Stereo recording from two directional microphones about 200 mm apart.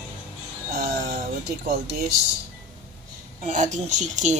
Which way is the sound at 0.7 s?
50° right (ahead or behind).